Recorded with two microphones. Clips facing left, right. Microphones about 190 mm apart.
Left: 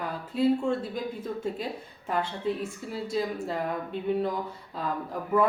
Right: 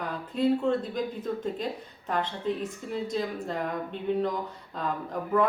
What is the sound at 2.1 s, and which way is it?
Speech, 5° left (ahead or behind).